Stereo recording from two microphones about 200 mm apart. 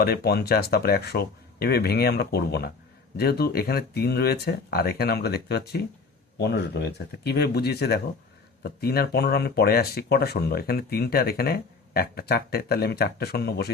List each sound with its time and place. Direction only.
0.0 s speech: 50° left (ahead or behind)